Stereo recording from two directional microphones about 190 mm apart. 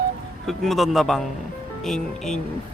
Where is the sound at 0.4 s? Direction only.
Centre (ahead or behind).